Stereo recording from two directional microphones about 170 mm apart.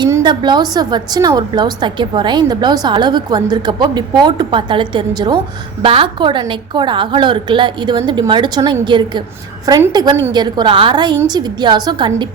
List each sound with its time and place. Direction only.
0.0 s a woman's voice: 25° right (ahead or behind)